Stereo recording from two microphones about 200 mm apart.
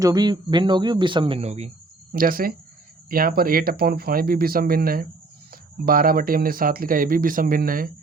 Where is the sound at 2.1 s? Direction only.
45° right (ahead or behind).